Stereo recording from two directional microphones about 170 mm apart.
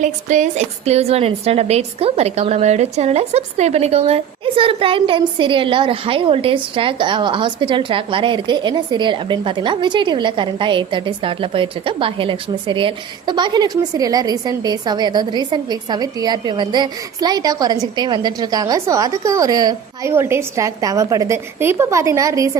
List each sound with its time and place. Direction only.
0.0 s a woman's voice: 45° right (ahead or behind); by 22.5 s 20° right (ahead or behind)